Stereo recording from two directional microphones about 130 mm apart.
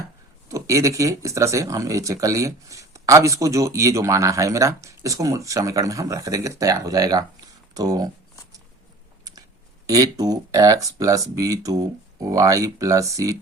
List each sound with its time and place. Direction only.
0.4 s speech: 25° right (ahead or behind)
9.8 s speech: 30° right (ahead or behind)